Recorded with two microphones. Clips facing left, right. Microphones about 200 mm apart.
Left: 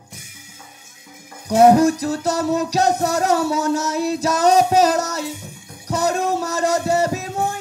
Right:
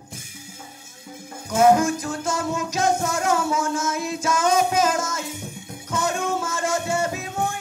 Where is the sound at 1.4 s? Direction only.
35° left (ahead or behind).